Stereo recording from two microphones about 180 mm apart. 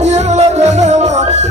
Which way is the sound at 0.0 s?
40° right (ahead or behind).